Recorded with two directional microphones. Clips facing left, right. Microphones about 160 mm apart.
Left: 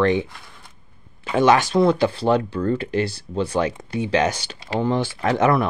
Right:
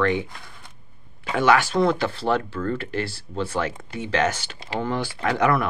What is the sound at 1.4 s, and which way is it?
Speech, 20° left (ahead or behind).